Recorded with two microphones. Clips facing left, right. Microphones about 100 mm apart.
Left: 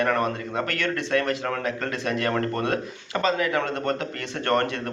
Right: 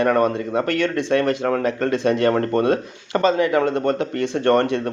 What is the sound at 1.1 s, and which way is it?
Speech, 30° right (ahead or behind).